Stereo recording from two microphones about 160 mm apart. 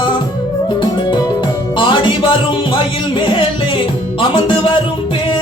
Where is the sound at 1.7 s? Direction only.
30° left (ahead or behind).